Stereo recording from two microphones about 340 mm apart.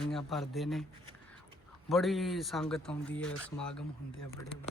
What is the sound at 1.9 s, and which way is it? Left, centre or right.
Speech, centre.